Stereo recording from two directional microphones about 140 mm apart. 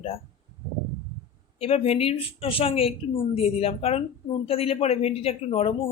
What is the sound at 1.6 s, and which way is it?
A woman's voice, 45° left (ahead or behind).